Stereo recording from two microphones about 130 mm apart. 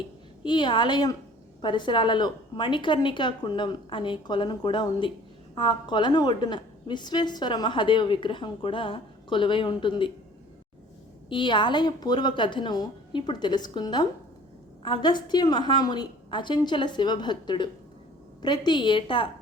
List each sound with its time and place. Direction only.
0.4 s a woman's voice: 35° left (ahead or behind)
11.3 s a woman's voice: 40° left (ahead or behind)